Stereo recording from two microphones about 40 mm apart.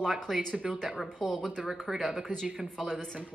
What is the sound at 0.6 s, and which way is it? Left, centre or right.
Speech, centre.